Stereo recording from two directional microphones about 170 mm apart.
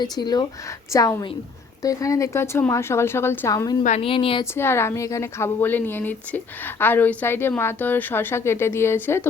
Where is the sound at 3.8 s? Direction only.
40° left (ahead or behind).